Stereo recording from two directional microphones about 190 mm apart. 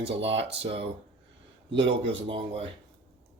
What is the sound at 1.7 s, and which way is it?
Speech, 75° right (ahead or behind).